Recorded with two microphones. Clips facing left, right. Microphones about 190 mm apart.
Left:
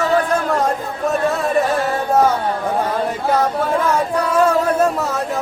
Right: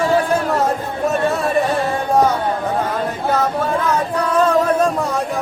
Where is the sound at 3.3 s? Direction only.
10° left (ahead or behind).